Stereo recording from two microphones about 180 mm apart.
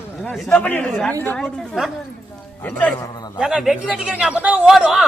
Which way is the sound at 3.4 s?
5° right (ahead or behind).